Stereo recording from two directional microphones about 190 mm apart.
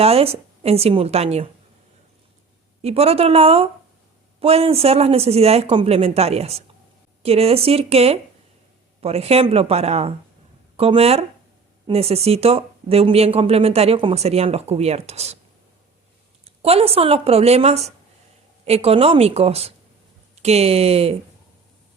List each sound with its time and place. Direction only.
0.0 s speech: 30° right (ahead or behind)
2.8 s speech: 30° right (ahead or behind)
16.4 s speech: 30° right (ahead or behind)